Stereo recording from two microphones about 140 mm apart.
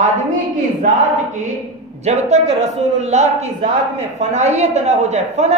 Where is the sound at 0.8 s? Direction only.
65° right (ahead or behind).